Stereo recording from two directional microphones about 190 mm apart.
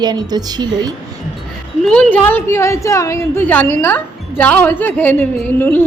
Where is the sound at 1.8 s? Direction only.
5° left (ahead or behind).